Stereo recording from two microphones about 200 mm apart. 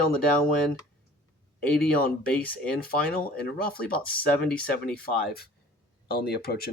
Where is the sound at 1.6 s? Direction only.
5° left (ahead or behind).